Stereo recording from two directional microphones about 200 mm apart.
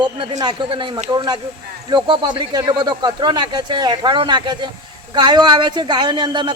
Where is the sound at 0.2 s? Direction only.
20° right (ahead or behind).